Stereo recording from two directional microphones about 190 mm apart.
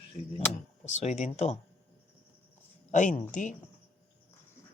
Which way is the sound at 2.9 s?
40° left (ahead or behind).